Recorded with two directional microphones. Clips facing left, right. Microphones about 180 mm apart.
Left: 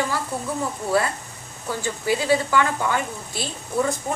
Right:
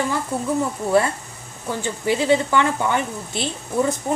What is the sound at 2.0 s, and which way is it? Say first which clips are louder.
Speech: right 3 dB; 25° right (ahead or behind).